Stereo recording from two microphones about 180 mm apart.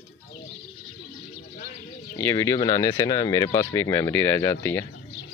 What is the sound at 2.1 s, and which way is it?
Speech, 15° left (ahead or behind).